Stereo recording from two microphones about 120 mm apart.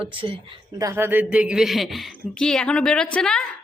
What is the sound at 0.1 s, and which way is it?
Speech, 45° right (ahead or behind).